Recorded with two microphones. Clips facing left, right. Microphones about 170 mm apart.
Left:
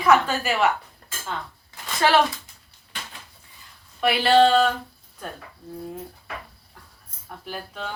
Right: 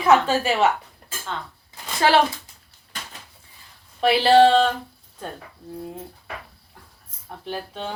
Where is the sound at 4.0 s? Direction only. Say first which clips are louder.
Right 3 dB; 30° right (ahead or behind).